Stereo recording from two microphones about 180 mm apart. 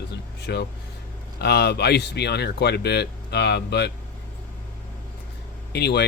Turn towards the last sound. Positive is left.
turn(degrees=65)  # may be behind; listen again after turning